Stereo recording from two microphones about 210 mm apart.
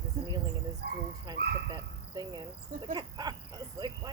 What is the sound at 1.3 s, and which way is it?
Speech, 20° right (ahead or behind).